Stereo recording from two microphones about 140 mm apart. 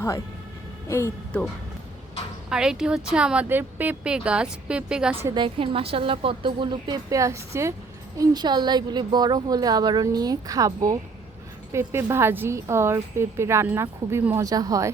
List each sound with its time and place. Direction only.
0.9 s speech: 20° left (ahead or behind)
2.5 s speech: 5° right (ahead or behind)
5.3 s a woman's voice: 35° right (ahead or behind)
11.7 s a woman's voice: 15° right (ahead or behind)